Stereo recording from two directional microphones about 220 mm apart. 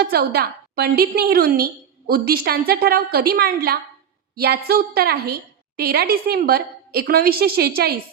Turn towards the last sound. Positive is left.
turn(degrees=-45)  # may be behind; listen again after turning